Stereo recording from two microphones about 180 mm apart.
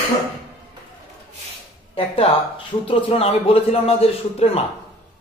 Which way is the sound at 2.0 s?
30° left (ahead or behind).